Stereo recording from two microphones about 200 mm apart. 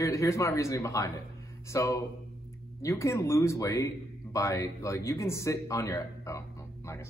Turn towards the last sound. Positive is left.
turn(degrees=15)  # may be behind; listen again after turning